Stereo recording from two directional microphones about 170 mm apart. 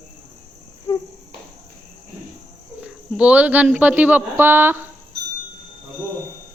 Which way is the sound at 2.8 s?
5° right (ahead or behind).